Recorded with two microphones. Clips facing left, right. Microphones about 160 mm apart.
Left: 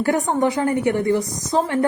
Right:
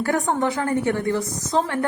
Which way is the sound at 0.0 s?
15° left (ahead or behind).